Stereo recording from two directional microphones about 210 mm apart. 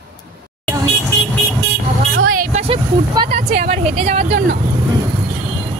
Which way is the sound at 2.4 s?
30° right (ahead or behind).